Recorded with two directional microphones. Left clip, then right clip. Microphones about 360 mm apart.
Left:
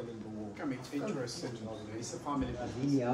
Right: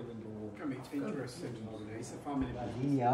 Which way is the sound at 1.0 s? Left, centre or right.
Left.